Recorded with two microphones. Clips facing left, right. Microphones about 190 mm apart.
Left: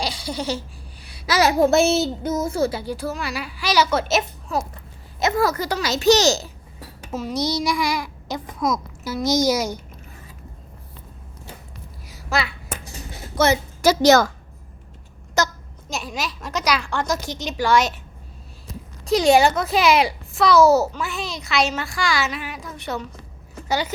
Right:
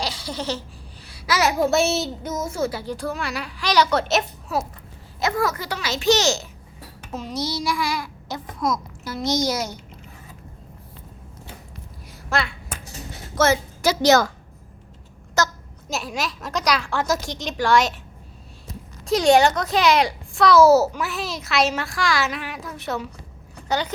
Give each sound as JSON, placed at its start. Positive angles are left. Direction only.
{"t": 0.0, "sound": "a sound", "side_deg": 15}
{"t": 2.2, "sound": "a child's voice", "side_deg": 35}
{"t": 2.7, "sound": "a child's voice", "side_deg": 10}
{"t": 5.4, "sound": "a child's voice", "side_deg": 40}
{"t": 7.1, "sound": "child singing", "side_deg": 5}
{"t": 7.4, "sound": "child singing", "side_deg": 15}
{"t": 12.0, "sound": "a sound", "side_deg": 5}
{"t": 13.3, "sound": "a woman's voice", "side_deg": 15}
{"t": 13.8, "sound": "a woman's voice", "side_deg": 45}
{"t": 15.4, "sound": "speech", "side_deg": 15}
{"t": 15.9, "sound": "a child's voice", "side_deg": 0}
{"t": 19.0, "sound": "a child's voice", "side_deg": 0}